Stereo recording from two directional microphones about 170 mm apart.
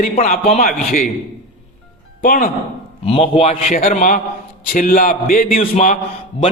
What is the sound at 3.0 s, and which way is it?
A man's voice, 35° left (ahead or behind).